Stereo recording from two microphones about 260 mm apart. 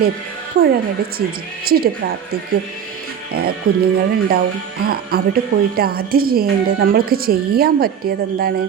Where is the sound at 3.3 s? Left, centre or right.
Right.